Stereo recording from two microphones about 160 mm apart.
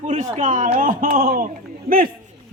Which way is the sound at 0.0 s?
50° right (ahead or behind).